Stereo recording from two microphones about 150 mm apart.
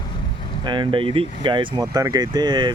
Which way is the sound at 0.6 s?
30° right (ahead or behind).